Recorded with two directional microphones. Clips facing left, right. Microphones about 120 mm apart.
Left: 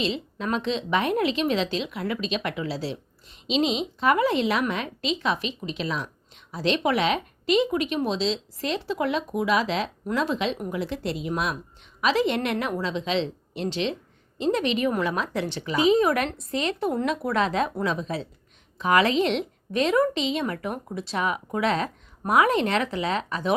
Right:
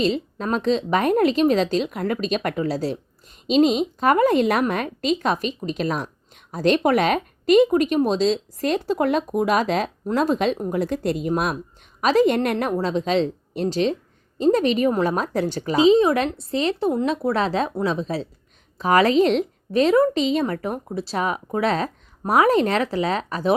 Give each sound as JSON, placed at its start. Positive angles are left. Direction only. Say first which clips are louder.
{"t": 0.0, "sound": "a woman's voice", "louder": "right 5 dB", "side_deg": -40}
{"t": 15.8, "sound": "a woman's voice", "louder": "right 5 dB", "side_deg": -25}